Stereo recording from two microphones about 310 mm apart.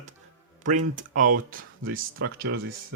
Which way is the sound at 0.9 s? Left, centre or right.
Right.